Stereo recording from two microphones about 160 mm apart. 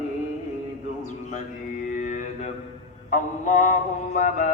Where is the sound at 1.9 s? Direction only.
55° left (ahead or behind).